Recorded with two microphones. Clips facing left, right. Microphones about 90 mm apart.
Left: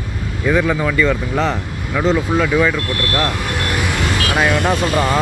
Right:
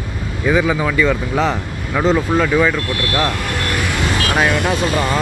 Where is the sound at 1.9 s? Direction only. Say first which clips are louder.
Right 1 dB; 15° right (ahead or behind).